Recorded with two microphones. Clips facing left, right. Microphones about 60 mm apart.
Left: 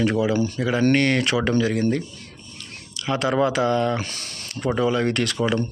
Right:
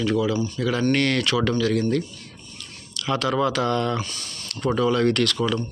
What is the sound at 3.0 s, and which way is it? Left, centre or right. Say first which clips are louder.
Speech: left 1 dB; centre.